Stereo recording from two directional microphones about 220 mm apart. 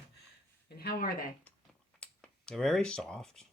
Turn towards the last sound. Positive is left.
turn(degrees=5)  # may be behind; listen again after turning